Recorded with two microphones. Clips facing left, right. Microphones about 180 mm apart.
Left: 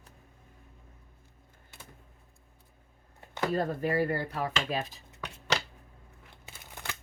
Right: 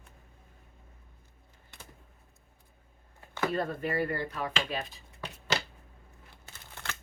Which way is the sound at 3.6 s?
40° left (ahead or behind).